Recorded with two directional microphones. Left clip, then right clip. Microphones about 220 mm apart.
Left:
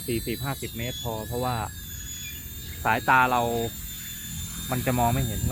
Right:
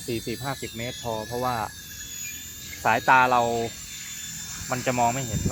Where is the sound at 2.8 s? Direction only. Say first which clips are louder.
Right 2 dB; 45° right (ahead or behind).